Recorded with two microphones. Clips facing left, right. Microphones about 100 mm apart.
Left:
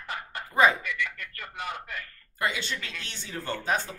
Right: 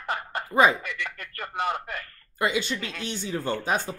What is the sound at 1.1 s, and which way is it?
Speech, 45° right (ahead or behind).